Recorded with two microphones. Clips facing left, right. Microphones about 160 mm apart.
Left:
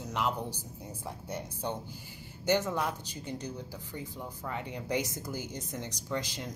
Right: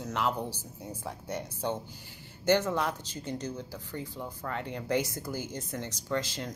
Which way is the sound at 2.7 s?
15° left (ahead or behind).